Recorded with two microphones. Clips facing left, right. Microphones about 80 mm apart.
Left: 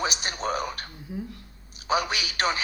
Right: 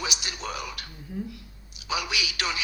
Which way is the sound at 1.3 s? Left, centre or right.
Left.